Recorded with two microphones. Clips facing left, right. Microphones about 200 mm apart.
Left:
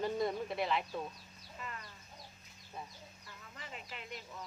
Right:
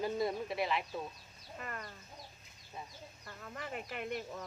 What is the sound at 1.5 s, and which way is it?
Speech, 55° right (ahead or behind).